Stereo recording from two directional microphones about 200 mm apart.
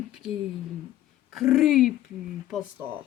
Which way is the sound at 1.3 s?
Centre (ahead or behind).